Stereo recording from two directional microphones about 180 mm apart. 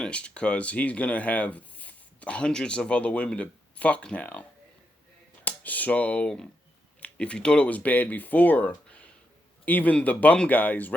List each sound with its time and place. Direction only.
0.0 s speech: 5° left (ahead or behind)
5.5 s speech: 10° left (ahead or behind)